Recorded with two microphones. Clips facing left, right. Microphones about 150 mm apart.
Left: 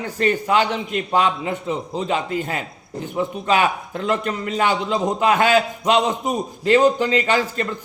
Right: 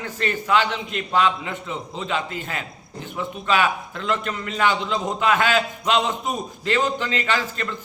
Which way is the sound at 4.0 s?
40° left (ahead or behind).